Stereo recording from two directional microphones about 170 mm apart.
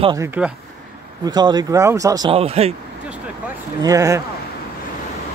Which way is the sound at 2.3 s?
35° right (ahead or behind).